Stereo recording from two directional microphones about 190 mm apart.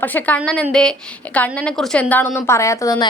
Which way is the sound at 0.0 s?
10° left (ahead or behind).